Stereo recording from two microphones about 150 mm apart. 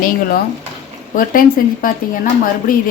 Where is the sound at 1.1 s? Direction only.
70° left (ahead or behind).